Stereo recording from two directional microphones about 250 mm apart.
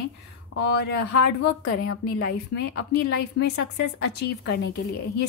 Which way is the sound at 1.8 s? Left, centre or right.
Left.